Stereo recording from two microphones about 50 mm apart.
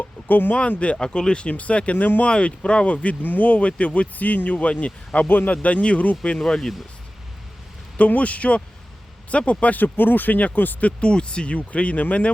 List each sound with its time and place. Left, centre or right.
0.0 s a sound: left
0.9 s speech: centre
6.4 s speech: centre
7.9 s speech: left
11.1 s speech: centre